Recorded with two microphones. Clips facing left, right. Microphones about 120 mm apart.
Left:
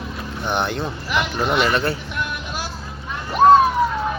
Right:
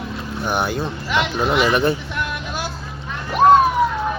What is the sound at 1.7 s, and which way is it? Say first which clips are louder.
Speech: right 4 dB; 20° right (ahead or behind).